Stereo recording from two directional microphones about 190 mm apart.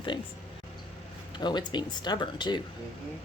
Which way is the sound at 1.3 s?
25° left (ahead or behind).